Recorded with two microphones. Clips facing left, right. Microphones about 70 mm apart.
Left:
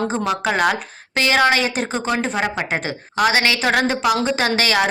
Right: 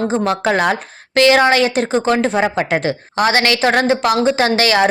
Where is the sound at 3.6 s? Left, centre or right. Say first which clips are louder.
Right 4 dB; right.